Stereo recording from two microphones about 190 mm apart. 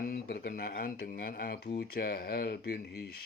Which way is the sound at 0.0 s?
50° left (ahead or behind).